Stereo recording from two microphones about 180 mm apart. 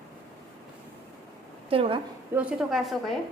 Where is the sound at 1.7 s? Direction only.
30° right (ahead or behind).